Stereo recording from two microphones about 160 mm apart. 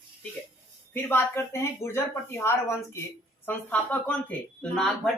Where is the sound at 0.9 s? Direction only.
15° left (ahead or behind).